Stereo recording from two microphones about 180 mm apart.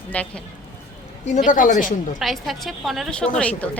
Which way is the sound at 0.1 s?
10° left (ahead or behind).